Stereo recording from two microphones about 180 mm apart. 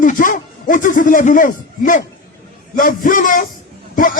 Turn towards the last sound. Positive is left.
turn(degrees=50)  # may be behind; listen again after turning